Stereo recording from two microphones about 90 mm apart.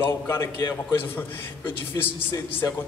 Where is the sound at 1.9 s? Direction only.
45° left (ahead or behind).